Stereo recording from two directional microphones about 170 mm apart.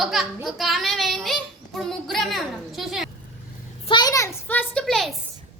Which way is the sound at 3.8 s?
25° left (ahead or behind).